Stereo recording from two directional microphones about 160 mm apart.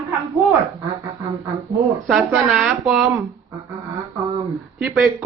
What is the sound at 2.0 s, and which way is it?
Speech, centre (ahead or behind).